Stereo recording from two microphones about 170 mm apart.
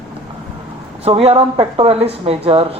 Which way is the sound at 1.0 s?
35° right (ahead or behind).